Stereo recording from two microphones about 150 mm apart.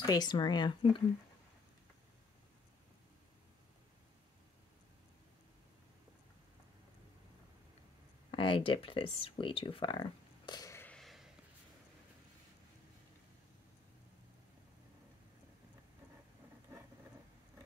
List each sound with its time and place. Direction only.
0.0 s speech: 25° left (ahead or behind)
8.3 s speech: 35° left (ahead or behind)
10.9 s a sound: centre (ahead or behind)